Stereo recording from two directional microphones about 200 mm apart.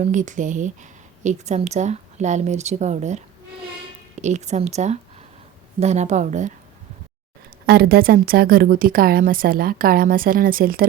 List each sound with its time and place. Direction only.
0.0 s speech: 40° right (ahead or behind)
7.7 s a woman's voice: 50° right (ahead or behind)